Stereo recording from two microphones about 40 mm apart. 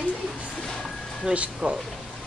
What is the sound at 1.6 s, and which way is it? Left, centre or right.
Speech, centre.